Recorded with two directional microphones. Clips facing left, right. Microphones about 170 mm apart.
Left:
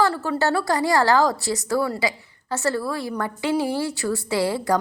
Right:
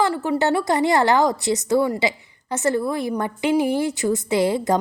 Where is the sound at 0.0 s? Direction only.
15° right (ahead or behind).